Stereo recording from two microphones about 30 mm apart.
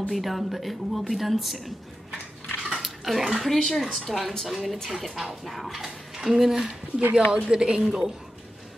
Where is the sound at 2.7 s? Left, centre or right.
Centre.